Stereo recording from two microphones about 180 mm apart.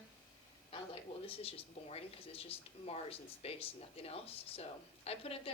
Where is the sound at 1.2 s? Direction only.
35° left (ahead or behind).